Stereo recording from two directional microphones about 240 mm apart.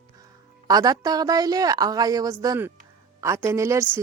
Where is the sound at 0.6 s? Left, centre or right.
Centre.